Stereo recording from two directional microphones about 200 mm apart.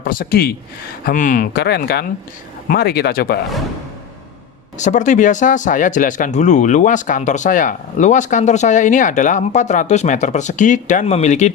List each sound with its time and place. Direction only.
0.0 s speech: 45° left (ahead or behind)
4.8 s speech: 35° left (ahead or behind)